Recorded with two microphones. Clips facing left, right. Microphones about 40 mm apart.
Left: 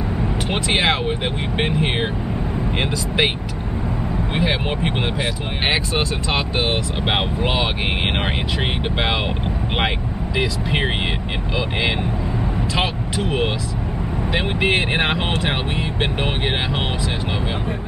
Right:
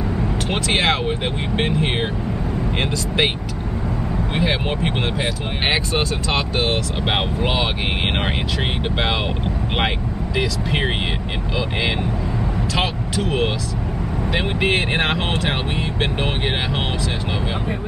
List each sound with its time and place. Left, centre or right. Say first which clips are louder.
0.5 s speech: even; centre
4.4 s speech: even; centre
10.3 s speech: left 1 dB; centre